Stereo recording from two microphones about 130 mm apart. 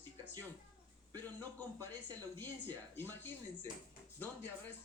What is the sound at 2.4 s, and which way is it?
Speech, 15° left (ahead or behind).